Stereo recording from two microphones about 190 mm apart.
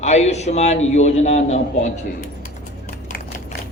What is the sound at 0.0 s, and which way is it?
A man's voice, 35° left (ahead or behind).